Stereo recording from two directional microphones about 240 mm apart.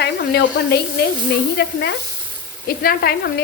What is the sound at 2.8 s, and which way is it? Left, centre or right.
Speech, left.